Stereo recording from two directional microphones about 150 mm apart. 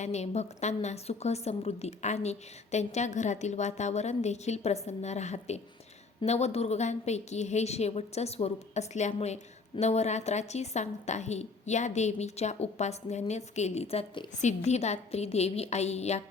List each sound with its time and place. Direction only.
0.0 s a woman's voice: 50° left (ahead or behind)